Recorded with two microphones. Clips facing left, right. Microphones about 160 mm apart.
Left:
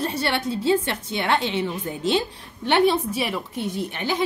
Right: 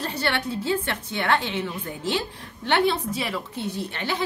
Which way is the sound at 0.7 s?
15° left (ahead or behind).